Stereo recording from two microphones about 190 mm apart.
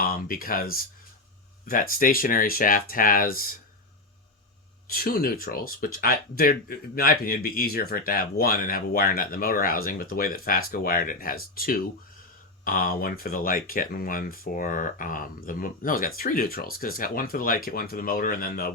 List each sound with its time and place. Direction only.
0.0 s speech: 50° left (ahead or behind)
4.9 s speech: 50° left (ahead or behind)